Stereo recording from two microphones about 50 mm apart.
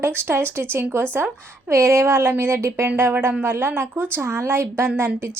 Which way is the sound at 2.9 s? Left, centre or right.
Right.